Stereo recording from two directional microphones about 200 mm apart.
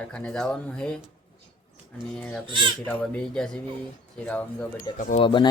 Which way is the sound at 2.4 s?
25° right (ahead or behind).